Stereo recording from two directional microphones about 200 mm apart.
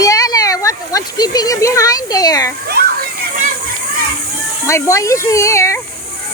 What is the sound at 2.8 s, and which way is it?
Children playing, 55° right (ahead or behind).